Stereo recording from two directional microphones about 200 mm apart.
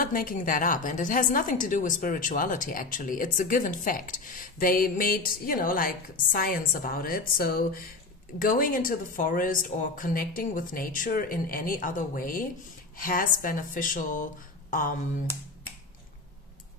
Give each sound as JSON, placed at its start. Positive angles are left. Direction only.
{"t": 0.0, "sound": "a woman's voice", "side_deg": 45}